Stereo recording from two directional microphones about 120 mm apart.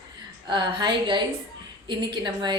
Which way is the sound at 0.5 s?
40° right (ahead or behind).